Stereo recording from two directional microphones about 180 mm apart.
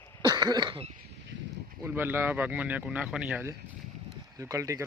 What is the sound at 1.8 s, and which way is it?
Speech, 15° right (ahead or behind).